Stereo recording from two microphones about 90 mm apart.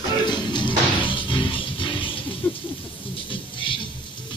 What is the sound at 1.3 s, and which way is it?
Music, 75° left (ahead or behind).